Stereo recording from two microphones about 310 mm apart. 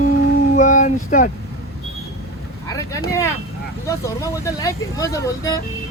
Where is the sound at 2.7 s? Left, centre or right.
Centre.